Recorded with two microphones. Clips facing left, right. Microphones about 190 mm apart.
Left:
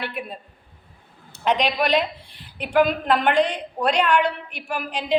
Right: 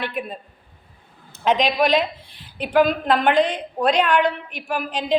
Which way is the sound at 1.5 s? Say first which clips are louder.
Right 3 dB; 45° right (ahead or behind).